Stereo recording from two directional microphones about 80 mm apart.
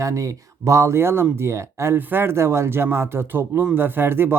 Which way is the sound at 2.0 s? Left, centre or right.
Right.